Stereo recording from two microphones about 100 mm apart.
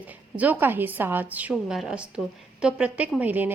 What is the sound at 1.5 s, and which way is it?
A woman's voice, 5° right (ahead or behind).